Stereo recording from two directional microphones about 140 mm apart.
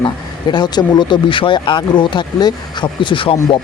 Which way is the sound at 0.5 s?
30° left (ahead or behind).